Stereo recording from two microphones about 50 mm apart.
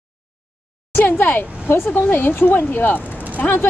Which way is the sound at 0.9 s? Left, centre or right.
Left.